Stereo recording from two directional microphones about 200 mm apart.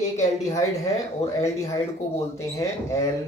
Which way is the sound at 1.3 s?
15° left (ahead or behind).